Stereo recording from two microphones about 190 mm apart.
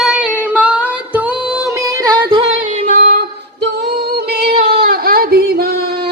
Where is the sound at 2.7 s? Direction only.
40° right (ahead or behind).